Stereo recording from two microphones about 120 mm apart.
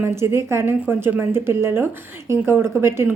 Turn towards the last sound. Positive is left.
turn(degrees=-20)  # may be behind; listen again after turning